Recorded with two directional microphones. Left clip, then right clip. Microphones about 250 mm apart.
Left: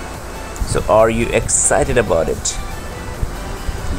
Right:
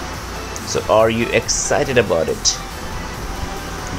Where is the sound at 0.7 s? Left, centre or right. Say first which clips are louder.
Left 2 dB; centre.